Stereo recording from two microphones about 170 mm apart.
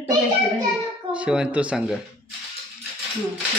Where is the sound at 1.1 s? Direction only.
5° right (ahead or behind).